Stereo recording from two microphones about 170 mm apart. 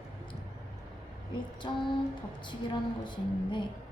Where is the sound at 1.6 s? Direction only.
25° left (ahead or behind).